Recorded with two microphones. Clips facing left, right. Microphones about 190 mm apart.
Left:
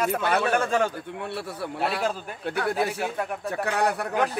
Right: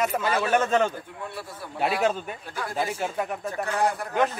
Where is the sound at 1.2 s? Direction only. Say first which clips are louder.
Left 5 dB; 70° left (ahead or behind).